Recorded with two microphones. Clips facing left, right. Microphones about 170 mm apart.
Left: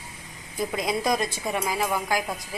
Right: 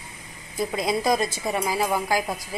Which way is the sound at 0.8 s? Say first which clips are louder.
Right 3 dB; centre (ahead or behind).